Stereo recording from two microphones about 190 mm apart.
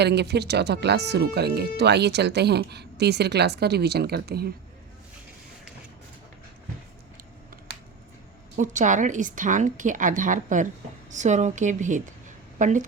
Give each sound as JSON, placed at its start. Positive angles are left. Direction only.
{"t": 0.0, "sound": "speech", "side_deg": -60}
{"t": 8.5, "sound": "a woman's voice", "side_deg": -40}